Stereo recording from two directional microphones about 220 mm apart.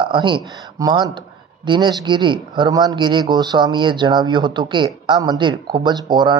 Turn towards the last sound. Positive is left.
turn(degrees=-20)  # may be behind; listen again after turning